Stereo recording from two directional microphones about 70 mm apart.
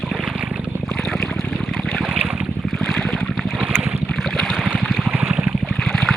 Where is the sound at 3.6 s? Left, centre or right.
Centre.